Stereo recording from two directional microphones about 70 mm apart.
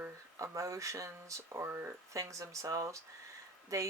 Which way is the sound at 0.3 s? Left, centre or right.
Right.